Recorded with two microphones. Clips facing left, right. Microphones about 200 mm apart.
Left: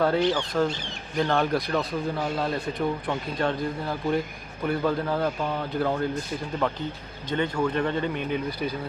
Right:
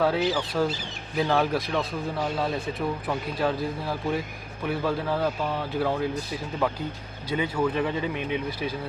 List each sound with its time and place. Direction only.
0.0 s speech: 5° right (ahead or behind)